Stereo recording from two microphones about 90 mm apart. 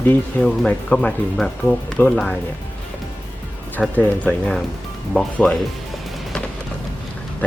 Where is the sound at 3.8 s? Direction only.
15° left (ahead or behind).